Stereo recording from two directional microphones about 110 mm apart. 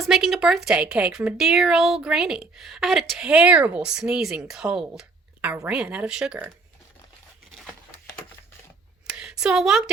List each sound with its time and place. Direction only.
0.0 s speech: centre (ahead or behind)
9.1 s a woman's voice: 5° right (ahead or behind)